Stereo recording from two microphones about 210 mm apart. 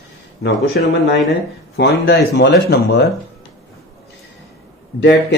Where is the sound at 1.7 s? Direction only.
55° left (ahead or behind).